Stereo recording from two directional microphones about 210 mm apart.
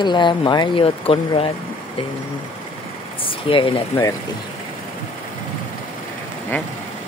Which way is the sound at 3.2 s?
25° left (ahead or behind).